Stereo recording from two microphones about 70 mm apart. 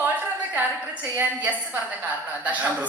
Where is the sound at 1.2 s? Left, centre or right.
Right.